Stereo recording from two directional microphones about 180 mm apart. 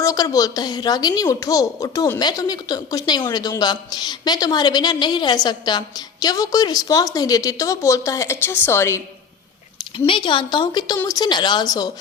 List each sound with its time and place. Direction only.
0.0 s speech: 20° left (ahead or behind)
10.1 s speech: 30° left (ahead or behind)